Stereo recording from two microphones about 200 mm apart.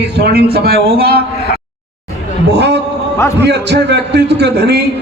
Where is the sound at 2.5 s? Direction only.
55° right (ahead or behind).